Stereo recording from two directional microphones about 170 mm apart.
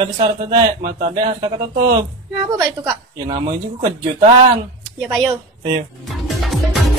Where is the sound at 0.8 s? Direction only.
60° right (ahead or behind).